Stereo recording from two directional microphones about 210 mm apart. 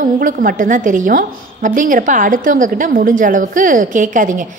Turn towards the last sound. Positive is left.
turn(degrees=-40)  # may be behind; listen again after turning